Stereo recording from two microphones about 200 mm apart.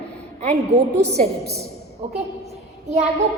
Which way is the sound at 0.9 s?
35° right (ahead or behind).